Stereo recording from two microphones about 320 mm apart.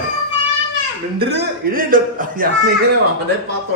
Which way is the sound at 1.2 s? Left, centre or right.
Right.